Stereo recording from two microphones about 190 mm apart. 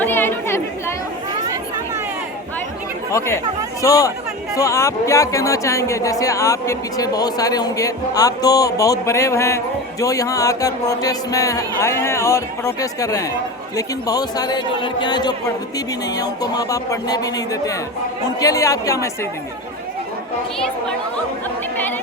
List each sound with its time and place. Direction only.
0.0 s chatter: 10° left (ahead or behind)
3.1 s speech: 15° left (ahead or behind)